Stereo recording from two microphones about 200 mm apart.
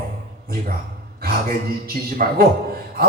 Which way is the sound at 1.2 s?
50° right (ahead or behind).